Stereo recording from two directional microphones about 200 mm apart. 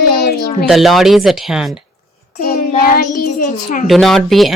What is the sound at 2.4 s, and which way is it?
A child's voice, 45° left (ahead or behind).